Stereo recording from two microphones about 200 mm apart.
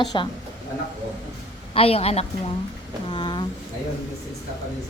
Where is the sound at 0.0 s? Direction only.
20° left (ahead or behind).